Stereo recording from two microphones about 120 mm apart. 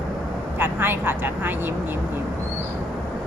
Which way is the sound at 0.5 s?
20° right (ahead or behind).